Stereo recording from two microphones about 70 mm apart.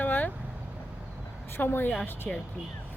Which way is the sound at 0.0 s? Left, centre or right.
Left.